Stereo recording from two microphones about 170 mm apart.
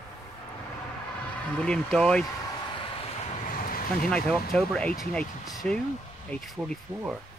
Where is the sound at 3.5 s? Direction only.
55° left (ahead or behind).